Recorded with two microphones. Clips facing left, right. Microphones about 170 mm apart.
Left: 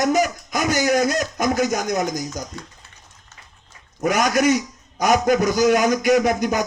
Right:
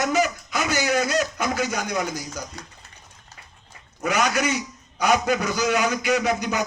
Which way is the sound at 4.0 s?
45° left (ahead or behind).